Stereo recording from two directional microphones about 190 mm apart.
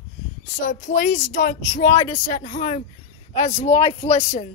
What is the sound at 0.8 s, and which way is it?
Speech, 70° left (ahead or behind).